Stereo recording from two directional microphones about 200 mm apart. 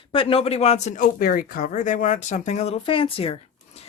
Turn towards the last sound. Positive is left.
turn(degrees=30)  # may be behind; listen again after turning